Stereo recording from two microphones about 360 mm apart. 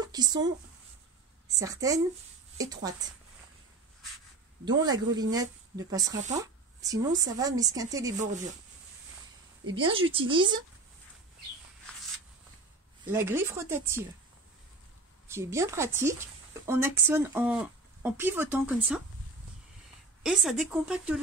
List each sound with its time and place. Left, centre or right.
0.0 s speech: centre
1.6 s a woman's voice: centre
4.6 s speech: centre
9.7 s speech: centre
13.0 s speech: centre
15.2 s speech: centre
20.2 s speech: centre